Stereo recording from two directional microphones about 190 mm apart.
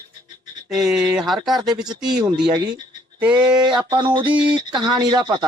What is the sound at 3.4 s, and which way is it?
Speech, 25° right (ahead or behind).